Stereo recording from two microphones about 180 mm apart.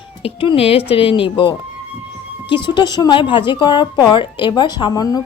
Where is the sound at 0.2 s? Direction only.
30° left (ahead or behind).